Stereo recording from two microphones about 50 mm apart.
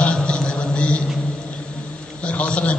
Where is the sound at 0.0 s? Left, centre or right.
Centre.